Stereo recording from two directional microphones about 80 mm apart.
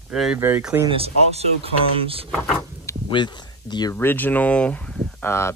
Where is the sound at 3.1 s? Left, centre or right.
Left.